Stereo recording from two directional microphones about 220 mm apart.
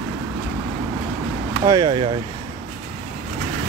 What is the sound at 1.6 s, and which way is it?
Speech, 20° right (ahead or behind).